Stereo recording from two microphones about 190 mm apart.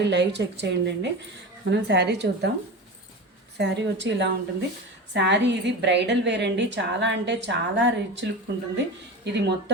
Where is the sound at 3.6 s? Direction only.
65° right (ahead or behind).